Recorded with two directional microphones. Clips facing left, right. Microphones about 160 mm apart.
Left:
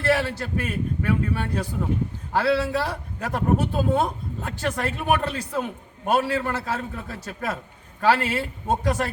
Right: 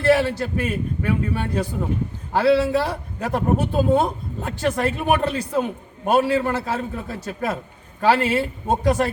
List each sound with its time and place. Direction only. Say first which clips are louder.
0.0 s a man's voice: right 5 dB; 15° right (ahead or behind)